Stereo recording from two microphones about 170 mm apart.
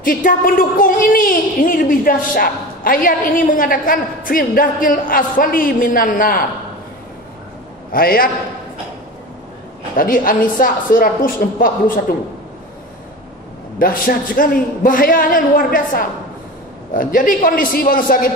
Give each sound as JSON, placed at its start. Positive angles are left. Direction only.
{"t": 0.0, "sound": "a woman's voice", "side_deg": 55}
{"t": 7.9, "sound": "a woman's voice", "side_deg": 60}
{"t": 9.9, "sound": "a woman's voice", "side_deg": 55}
{"t": 13.7, "sound": "a woman's voice", "side_deg": 55}